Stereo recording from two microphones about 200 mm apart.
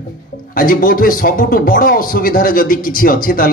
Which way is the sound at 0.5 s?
45° left (ahead or behind).